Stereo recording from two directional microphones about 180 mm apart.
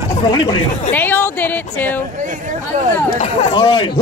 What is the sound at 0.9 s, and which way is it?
A man's voice, 10° left (ahead or behind).